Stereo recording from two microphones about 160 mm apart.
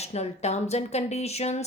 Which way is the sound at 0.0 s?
45° left (ahead or behind).